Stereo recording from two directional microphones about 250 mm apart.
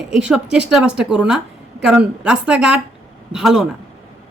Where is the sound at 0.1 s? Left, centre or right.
Centre.